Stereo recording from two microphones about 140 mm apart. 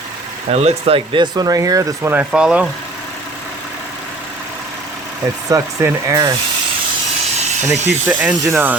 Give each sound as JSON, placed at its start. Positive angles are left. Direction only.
{"t": 0.5, "sound": "speech", "side_deg": -45}
{"t": 2.1, "sound": "speech", "side_deg": -5}
{"t": 5.5, "sound": "speech", "side_deg": -25}
{"t": 7.3, "sound": "a sound", "side_deg": -55}
{"t": 8.0, "sound": "speech", "side_deg": -10}